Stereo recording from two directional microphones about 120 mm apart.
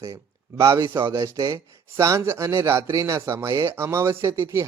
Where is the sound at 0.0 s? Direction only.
25° right (ahead or behind).